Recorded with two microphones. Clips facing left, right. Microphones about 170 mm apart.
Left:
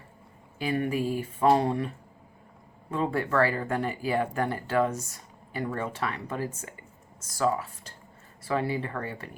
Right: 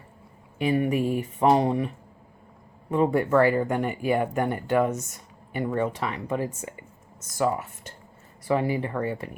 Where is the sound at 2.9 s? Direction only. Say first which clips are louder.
Right 6 dB; 20° right (ahead or behind).